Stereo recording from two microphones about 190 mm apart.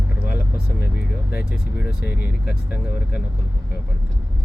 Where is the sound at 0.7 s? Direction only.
55° left (ahead or behind).